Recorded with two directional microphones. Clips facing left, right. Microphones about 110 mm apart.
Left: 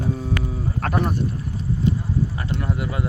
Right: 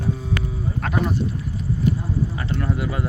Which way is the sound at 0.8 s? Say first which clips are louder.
Even; 55° left (ahead or behind).